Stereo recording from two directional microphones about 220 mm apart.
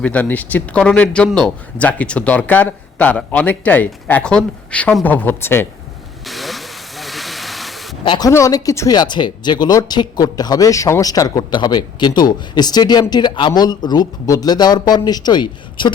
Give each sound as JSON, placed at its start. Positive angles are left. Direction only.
{"t": 0.0, "sound": "speech", "side_deg": 5}
{"t": 6.2, "sound": "vehicle", "side_deg": 0}
{"t": 8.0, "sound": "speech", "side_deg": 20}